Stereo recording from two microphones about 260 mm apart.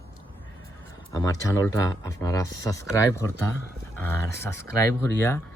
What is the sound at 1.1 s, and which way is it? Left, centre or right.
Speech, centre.